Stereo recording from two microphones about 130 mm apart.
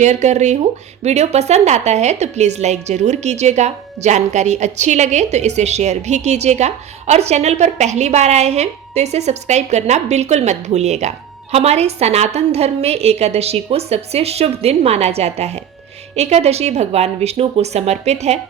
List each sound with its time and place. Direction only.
0.0 s a woman's voice: 65° right (ahead or behind)